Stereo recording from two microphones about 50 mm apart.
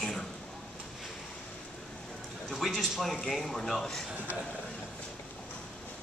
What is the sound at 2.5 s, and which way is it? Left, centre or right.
A man's voice, centre.